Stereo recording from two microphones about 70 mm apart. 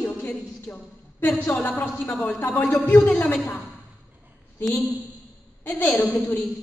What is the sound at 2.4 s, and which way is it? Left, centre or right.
Speech, left.